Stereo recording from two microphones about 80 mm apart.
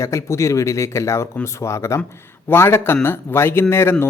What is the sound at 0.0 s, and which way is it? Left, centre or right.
Speech, left.